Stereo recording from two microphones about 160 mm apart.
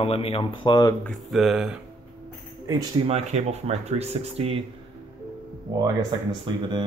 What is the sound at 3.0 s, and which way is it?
Speech, 40° right (ahead or behind).